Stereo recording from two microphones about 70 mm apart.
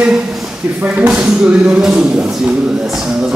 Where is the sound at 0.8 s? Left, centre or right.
Centre.